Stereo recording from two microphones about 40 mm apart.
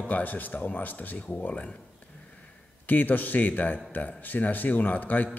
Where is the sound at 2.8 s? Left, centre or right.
Left.